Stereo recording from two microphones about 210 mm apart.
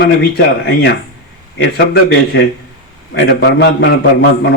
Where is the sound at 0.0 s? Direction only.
50° left (ahead or behind).